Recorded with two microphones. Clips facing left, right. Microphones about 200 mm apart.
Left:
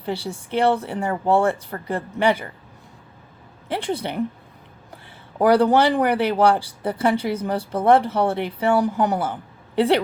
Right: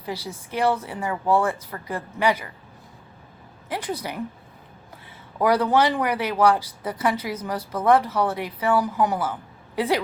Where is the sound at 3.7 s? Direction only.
25° left (ahead or behind).